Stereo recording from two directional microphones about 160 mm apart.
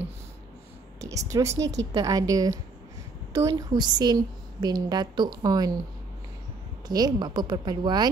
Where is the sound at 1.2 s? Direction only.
20° right (ahead or behind).